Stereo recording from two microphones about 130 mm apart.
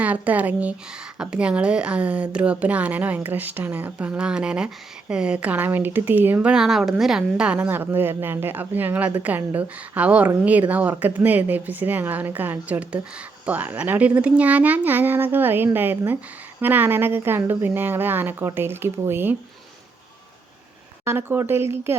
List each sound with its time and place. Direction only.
0.0 s a woman's voice: 10° right (ahead or behind)
21.0 s speech: 20° right (ahead or behind)